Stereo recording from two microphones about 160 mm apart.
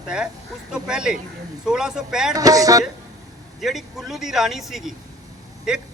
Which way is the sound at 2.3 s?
20° right (ahead or behind).